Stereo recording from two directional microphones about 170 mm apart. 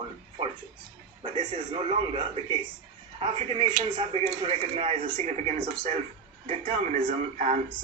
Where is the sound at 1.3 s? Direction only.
35° right (ahead or behind).